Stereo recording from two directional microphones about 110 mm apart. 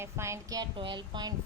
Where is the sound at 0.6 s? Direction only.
45° right (ahead or behind).